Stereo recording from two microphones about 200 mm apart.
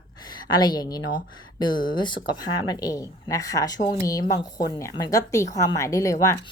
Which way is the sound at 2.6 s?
20° left (ahead or behind).